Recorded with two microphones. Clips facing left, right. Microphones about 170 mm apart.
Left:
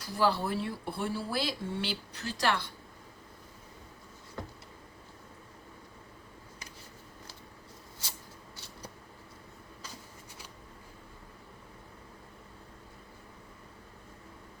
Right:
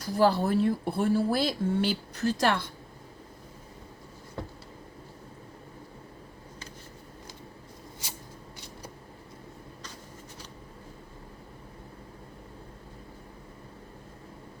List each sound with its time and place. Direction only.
0.0 s speech: 45° right (ahead or behind)